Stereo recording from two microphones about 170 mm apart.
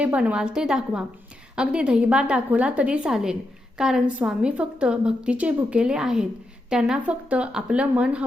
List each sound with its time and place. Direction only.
0.0 s a woman's voice: 5° right (ahead or behind)